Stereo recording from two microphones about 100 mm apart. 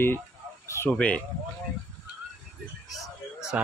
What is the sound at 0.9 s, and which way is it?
Speech, 10° left (ahead or behind).